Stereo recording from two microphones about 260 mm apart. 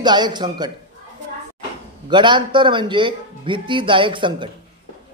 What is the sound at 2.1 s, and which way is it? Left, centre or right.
A man's voice, centre.